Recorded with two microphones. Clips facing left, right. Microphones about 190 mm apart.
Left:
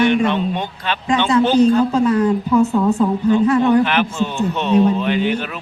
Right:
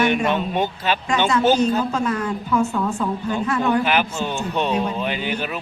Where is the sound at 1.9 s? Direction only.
35° left (ahead or behind).